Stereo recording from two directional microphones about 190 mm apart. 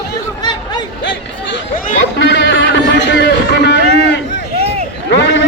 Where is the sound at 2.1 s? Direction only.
65° left (ahead or behind).